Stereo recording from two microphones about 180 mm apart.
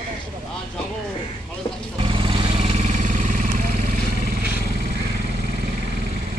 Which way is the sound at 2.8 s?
45° right (ahead or behind).